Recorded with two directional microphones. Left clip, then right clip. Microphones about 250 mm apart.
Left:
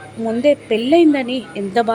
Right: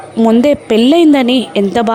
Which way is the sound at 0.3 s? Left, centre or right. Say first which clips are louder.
Right 4 dB; right.